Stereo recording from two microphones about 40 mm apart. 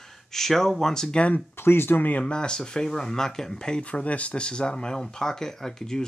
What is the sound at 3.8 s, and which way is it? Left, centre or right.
Speech, left.